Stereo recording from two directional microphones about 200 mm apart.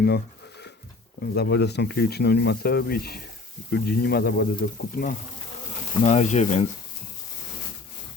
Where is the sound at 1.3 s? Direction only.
55° left (ahead or behind).